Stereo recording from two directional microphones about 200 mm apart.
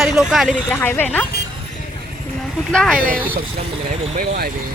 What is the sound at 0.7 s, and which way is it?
Speech, 10° left (ahead or behind).